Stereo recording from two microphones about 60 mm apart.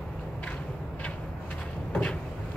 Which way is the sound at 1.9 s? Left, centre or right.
Left.